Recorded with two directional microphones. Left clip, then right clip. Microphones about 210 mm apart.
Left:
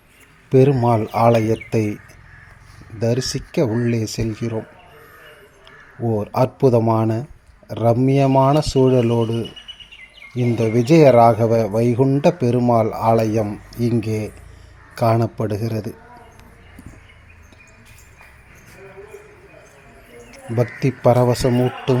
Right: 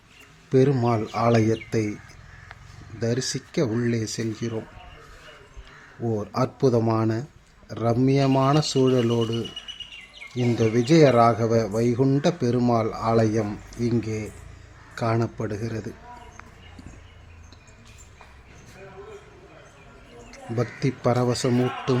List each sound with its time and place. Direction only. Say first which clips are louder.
0.5 s speech: left 6 dB; 10° left (ahead or behind)
3.0 s speech: left 6 dB; 15° left (ahead or behind)
6.0 s speech: left 7 dB; 15° left (ahead or behind)
20.3 s speech: left 7 dB; 15° left (ahead or behind)